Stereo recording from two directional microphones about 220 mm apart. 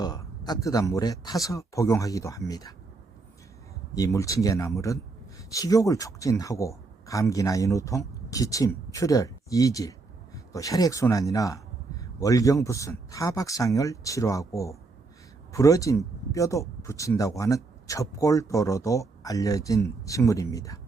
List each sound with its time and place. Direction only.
0.0 s speech: 15° left (ahead or behind)
3.9 s speech: 15° left (ahead or behind)